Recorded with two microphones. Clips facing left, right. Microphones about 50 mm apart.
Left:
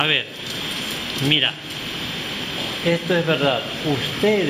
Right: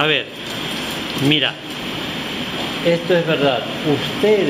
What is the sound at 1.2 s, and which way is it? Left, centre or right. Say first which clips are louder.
Speech: right 3 dB; centre.